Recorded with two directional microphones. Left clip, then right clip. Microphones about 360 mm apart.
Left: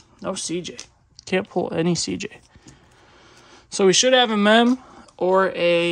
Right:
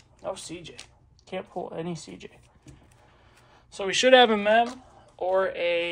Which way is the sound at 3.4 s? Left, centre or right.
Left.